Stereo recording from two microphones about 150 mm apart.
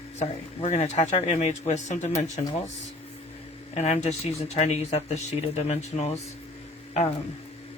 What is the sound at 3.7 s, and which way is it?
Speech, 45° left (ahead or behind).